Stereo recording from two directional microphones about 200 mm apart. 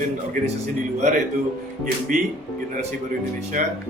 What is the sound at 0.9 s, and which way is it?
Speech, 35° right (ahead or behind).